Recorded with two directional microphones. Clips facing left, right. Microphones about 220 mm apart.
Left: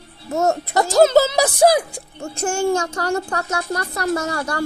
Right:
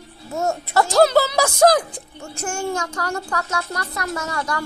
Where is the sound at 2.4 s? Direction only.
25° left (ahead or behind).